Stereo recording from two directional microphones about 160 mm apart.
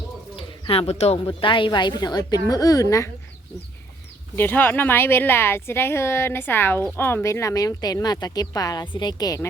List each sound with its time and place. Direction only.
0.3 s speech: 35° left (ahead or behind); by 3.1 s 20° left (ahead or behind)
4.4 s a woman's voice: 10° left (ahead or behind)